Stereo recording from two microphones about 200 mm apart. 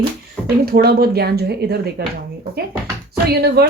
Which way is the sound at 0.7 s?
50° right (ahead or behind).